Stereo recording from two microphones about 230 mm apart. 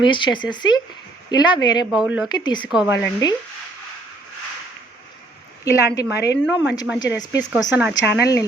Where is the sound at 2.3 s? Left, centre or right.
Centre.